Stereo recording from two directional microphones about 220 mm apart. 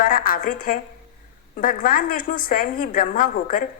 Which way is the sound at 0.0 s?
40° left (ahead or behind).